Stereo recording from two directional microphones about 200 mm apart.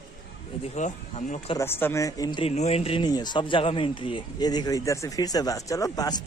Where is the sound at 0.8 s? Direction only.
35° left (ahead or behind).